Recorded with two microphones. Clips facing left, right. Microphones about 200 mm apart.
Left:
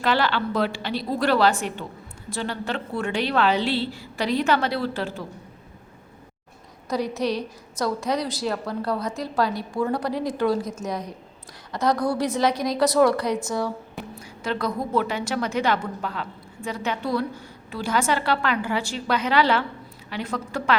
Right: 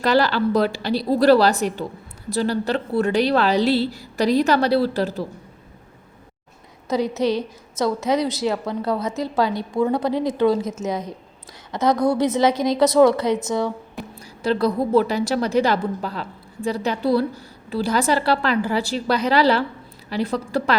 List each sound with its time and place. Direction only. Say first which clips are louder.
0.0 s a woman's voice: right 5 dB; 40° right (ahead or behind)
6.8 s a woman's voice: right 4 dB; 25° right (ahead or behind)
14.2 s a woman's voice: right 7 dB; 35° right (ahead or behind)